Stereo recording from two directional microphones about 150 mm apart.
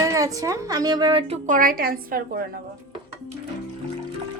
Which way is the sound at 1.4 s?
65° right (ahead or behind).